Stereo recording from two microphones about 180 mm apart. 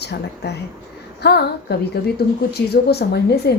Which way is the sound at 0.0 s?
65° left (ahead or behind).